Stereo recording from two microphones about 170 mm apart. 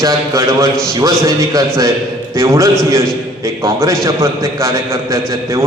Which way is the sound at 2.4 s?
15° right (ahead or behind).